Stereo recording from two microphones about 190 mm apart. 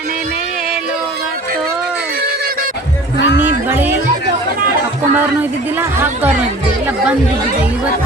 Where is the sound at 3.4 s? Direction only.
10° right (ahead or behind).